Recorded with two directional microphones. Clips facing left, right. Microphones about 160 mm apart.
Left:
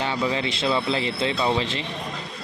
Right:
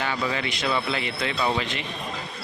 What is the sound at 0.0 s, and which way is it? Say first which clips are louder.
Speech: left 3 dB; 25° left (ahead or behind).